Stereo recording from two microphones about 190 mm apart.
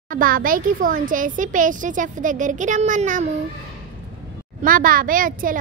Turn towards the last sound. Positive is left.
turn(degrees=-45)  # may be behind; listen again after turning